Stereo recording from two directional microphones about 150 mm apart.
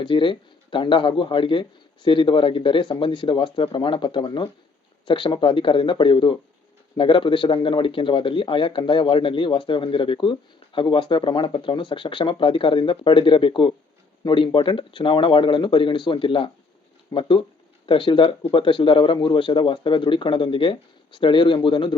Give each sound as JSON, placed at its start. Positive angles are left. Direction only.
{"t": 0.0, "sound": "speech", "side_deg": 35}